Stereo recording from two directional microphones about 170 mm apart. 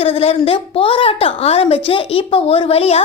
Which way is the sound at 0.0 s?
35° left (ahead or behind).